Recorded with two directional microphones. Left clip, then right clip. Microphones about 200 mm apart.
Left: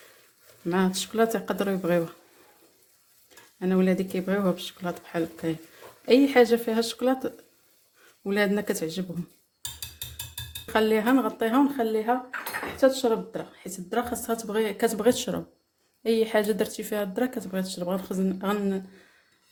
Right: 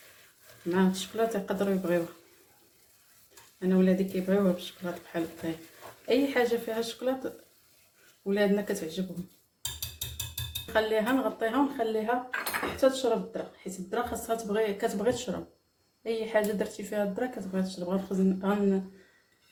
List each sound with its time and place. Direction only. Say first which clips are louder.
0.7 s speech: left 2 dB; 55° left (ahead or behind)
3.6 s speech: left 2 dB; 60° left (ahead or behind)
10.7 s speech: left 4 dB; 60° left (ahead or behind)
12.7 s speech: left 4 dB; 45° left (ahead or behind)
13.9 s speech: left 3 dB; 60° left (ahead or behind)